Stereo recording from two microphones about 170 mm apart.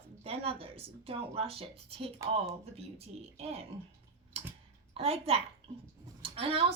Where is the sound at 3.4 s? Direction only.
35° right (ahead or behind).